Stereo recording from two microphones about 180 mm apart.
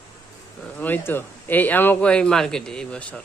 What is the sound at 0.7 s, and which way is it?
A man's voice, 10° left (ahead or behind).